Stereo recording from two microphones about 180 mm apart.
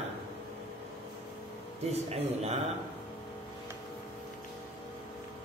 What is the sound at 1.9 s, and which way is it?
Speech, 35° right (ahead or behind).